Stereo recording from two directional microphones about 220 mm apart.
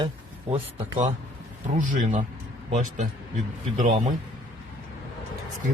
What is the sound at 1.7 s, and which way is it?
Speech, 35° right (ahead or behind).